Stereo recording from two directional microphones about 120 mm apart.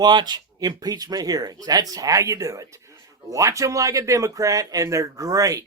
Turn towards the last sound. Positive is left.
turn(degrees=-30)  # may be behind; listen again after turning